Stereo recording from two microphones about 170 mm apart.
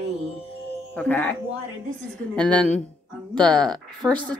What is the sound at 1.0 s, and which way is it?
Speech, 10° left (ahead or behind).